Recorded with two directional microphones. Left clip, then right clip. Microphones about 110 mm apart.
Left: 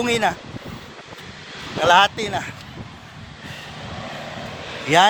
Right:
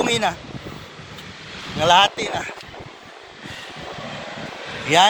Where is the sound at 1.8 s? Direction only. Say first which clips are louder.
Even; 90° left.